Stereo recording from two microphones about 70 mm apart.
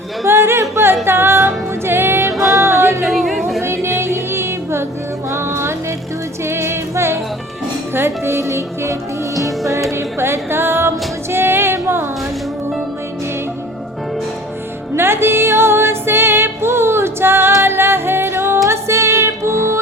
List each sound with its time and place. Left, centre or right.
0.3 s a sound: right
1.0 s music: right
3.0 s music: centre
3.6 s music: right
9.9 s music: right
14.9 s music: right